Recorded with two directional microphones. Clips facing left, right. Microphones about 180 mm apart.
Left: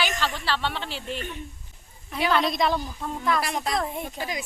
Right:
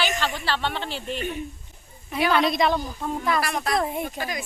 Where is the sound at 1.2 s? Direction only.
15° right (ahead or behind).